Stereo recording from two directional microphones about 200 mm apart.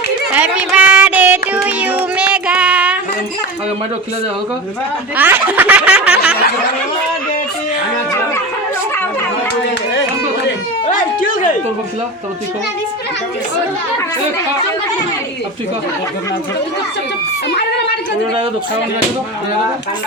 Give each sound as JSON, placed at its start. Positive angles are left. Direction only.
{"t": 0.3, "sound": "child singing", "side_deg": -5}
{"t": 5.1, "sound": "speech", "side_deg": -10}
{"t": 10.9, "sound": "speech", "side_deg": 40}